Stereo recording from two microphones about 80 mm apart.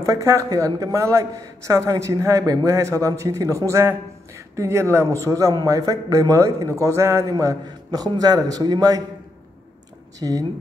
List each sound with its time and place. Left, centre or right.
0.0 s a man's voice: right
5.5 s a man's voice: right
10.1 s a man's voice: right